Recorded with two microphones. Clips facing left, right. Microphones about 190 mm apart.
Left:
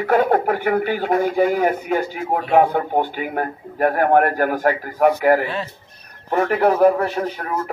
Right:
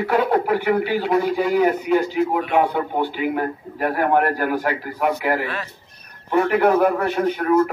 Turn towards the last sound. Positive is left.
turn(degrees=35)  # may be behind; listen again after turning